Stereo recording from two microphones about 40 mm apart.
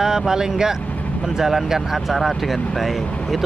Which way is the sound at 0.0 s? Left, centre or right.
Centre.